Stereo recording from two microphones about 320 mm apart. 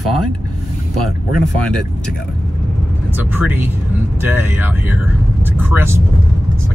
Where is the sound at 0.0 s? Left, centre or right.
Centre.